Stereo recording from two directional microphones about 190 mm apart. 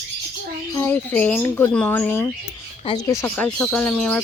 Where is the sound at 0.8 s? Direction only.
10° left (ahead or behind).